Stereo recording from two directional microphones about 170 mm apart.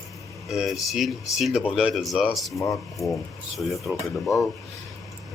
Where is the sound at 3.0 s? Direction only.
20° left (ahead or behind).